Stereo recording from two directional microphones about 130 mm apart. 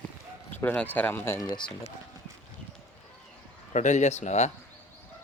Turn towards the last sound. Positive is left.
turn(degrees=60)  # may be behind; listen again after turning